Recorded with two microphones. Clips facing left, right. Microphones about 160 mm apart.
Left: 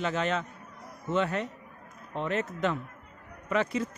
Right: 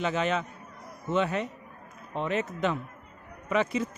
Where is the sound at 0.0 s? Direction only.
15° right (ahead or behind).